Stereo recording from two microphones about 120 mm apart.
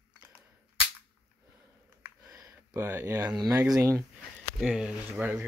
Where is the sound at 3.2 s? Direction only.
35° right (ahead or behind).